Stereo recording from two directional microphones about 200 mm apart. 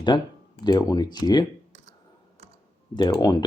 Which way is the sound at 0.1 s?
20° left (ahead or behind).